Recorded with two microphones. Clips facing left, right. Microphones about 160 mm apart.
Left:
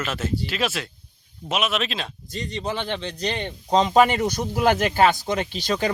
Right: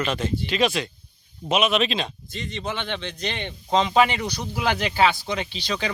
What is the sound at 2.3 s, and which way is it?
Speech, 35° left (ahead or behind).